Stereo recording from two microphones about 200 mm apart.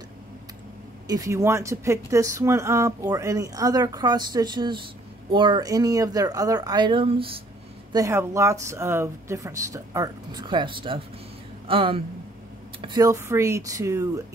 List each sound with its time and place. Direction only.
1.0 s speech: 15° right (ahead or behind)
7.9 s speech: 15° right (ahead or behind)